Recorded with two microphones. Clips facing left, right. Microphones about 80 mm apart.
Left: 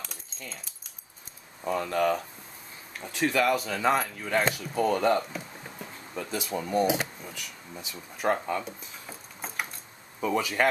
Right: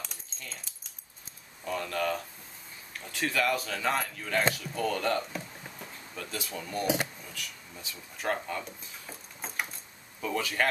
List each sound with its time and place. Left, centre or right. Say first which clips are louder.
0.0 s keys jangling: left 2 dB; centre
1.6 s speech: left 5 dB; left
4.4 s speech: left 1 dB; centre
4.7 s speech: left 9 dB; left; by 9.7 s centre
10.2 s speech: left 4 dB; centre